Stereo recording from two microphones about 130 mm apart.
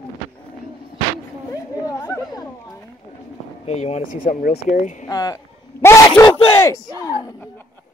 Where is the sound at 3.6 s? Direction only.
60° left (ahead or behind); by 4.9 s 85° left.